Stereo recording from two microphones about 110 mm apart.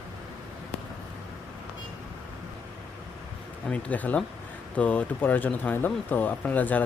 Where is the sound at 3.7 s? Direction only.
15° left (ahead or behind).